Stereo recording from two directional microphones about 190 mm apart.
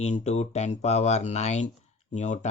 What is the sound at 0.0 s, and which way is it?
Speech, 35° left (ahead or behind).